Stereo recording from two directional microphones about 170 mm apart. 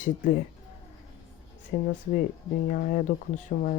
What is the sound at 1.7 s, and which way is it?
Speech, 50° left (ahead or behind).